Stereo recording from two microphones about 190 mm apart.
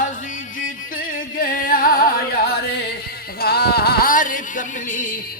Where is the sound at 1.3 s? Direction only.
50° left (ahead or behind).